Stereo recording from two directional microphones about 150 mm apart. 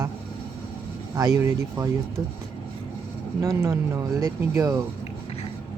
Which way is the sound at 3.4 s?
20° right (ahead or behind).